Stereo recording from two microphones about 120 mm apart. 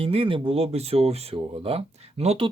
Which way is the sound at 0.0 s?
50° right (ahead or behind).